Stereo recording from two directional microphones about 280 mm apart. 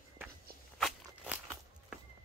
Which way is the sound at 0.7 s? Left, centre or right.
Centre.